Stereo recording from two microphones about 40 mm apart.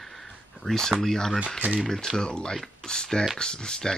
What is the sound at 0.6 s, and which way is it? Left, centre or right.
Speech, centre.